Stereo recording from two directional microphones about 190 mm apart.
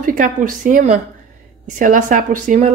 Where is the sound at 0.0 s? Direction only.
45° right (ahead or behind).